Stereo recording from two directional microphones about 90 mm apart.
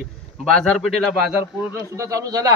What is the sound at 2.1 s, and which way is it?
Speech, 40° right (ahead or behind).